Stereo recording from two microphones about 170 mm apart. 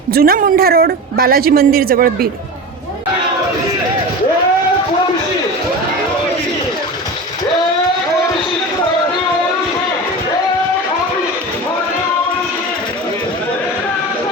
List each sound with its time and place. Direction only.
0.1 s speech: 60° right (ahead or behind)